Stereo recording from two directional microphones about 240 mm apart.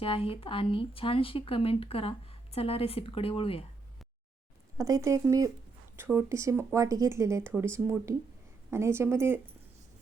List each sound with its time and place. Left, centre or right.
0.0 s speech: left
4.8 s speech: centre